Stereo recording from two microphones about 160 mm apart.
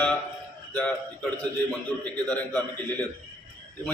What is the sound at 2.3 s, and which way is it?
Speech, 10° left (ahead or behind).